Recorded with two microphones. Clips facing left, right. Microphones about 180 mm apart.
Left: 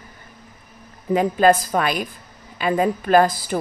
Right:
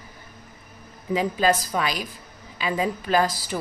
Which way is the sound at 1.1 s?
55° left (ahead or behind).